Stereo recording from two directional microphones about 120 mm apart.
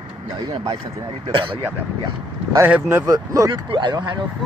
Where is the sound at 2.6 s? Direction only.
15° right (ahead or behind).